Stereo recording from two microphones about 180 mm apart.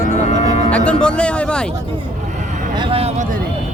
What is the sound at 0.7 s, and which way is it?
Speech, 5° left (ahead or behind).